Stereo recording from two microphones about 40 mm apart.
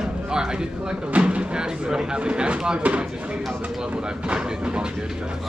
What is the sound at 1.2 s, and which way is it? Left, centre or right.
Speech, right.